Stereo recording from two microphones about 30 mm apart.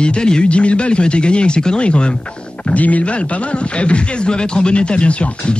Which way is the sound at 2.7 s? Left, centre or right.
Left.